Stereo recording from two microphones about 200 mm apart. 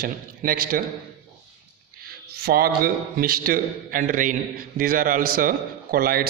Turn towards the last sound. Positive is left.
turn(degrees=-50)  # may be behind; listen again after turning